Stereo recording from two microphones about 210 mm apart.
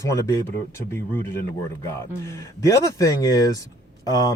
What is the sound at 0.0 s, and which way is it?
Speech, 15° left (ahead or behind).